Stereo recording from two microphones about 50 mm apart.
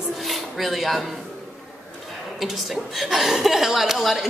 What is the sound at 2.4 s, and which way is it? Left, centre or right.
Speech, centre.